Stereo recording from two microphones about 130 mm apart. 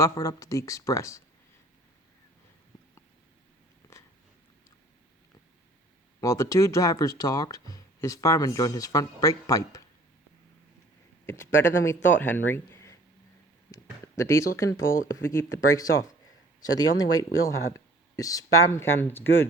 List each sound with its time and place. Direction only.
0.0 s speech: 25° left (ahead or behind)
6.1 s speech: 25° left (ahead or behind)
11.3 s speech: 20° left (ahead or behind)
14.2 s speech: 20° left (ahead or behind)